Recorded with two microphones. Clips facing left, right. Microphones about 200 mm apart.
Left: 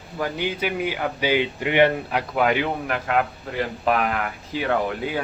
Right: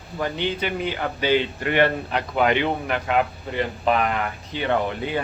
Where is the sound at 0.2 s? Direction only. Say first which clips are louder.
Even; 5° left (ahead or behind).